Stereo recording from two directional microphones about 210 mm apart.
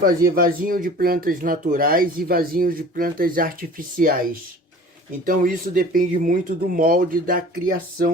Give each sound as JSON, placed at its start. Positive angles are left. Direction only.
{"t": 0.0, "sound": "speech", "side_deg": -45}